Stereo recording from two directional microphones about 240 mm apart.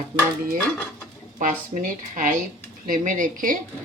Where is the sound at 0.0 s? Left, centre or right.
Right.